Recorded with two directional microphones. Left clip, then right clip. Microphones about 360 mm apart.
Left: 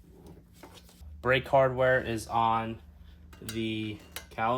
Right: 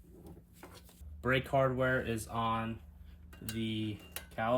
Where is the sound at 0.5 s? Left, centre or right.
Centre.